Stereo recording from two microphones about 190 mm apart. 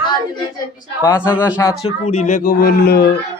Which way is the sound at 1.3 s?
5° right (ahead or behind).